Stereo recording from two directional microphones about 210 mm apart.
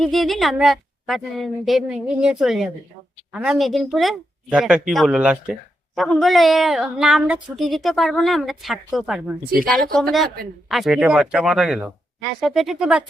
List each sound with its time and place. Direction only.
0.0 s speech: centre (ahead or behind)